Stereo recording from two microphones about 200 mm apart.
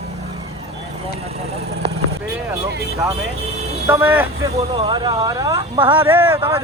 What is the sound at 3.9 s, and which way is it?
Speech, 10° right (ahead or behind).